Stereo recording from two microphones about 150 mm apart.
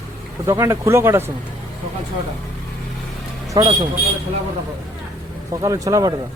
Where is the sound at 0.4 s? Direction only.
20° right (ahead or behind).